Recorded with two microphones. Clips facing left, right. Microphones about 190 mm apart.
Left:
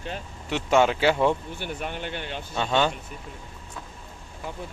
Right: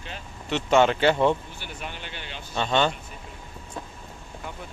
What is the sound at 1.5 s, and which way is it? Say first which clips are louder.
Speech: left 6 dB; 55° left (ahead or behind).